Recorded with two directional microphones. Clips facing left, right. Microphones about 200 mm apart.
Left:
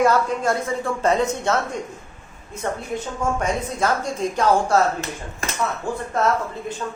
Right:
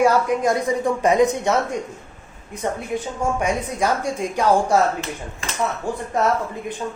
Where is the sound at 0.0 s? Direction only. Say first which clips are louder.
Right 2 dB; 15° right (ahead or behind).